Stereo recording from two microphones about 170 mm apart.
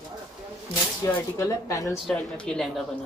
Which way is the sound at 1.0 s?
15° left (ahead or behind).